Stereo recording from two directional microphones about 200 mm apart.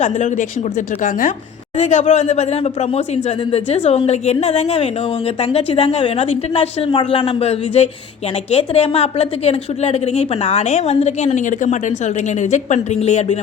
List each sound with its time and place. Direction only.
0.0 s a woman's voice: 40° left (ahead or behind)
1.8 s a woman's voice: 35° left (ahead or behind)